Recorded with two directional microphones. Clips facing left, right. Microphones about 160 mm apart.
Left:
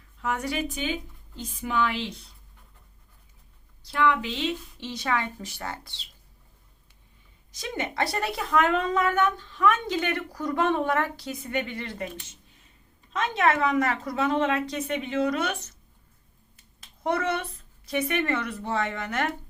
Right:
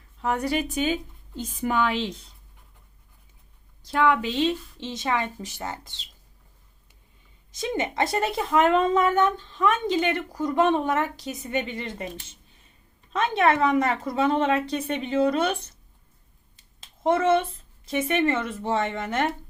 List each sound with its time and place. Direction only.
0.2 s a woman's voice: 30° right (ahead or behind); by 1.8 s 50° right (ahead or behind)
3.9 s speech: 40° right (ahead or behind)
4.8 s a woman's voice: 20° right (ahead or behind)
7.6 s a woman's voice: 25° right (ahead or behind)
13.1 s a woman's voice: 30° right (ahead or behind)
16.8 s a woman's voice: 25° right (ahead or behind)